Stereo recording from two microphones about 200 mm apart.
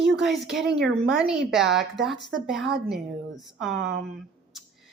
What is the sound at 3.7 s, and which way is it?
Speech, 60° right (ahead or behind).